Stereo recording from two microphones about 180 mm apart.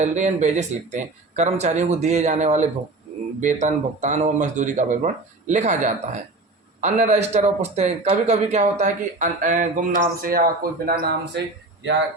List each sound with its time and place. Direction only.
0.0 s a man's voice: 40° right (ahead or behind); by 11.9 s 75° right (ahead or behind)